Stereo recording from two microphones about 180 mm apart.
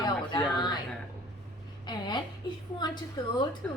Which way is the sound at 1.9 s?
25° left (ahead or behind).